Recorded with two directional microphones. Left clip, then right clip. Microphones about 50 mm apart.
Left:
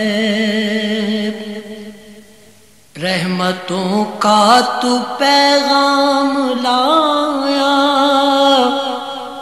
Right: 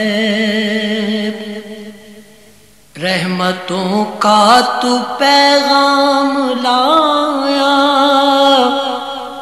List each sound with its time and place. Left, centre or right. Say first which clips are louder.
0.0 s music: right 2 dB; left
3.0 s mantra: right 2 dB; left
3.9 s mantra: right 2 dB; centre
6.6 s music: right 2 dB; left
8.1 s mantra: right 2 dB; centre; by 9.4 s left